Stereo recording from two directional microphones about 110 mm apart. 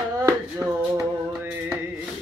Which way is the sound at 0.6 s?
20° right (ahead or behind).